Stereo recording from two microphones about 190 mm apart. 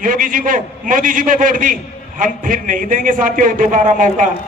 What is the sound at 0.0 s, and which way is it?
A man's voice, 45° right (ahead or behind).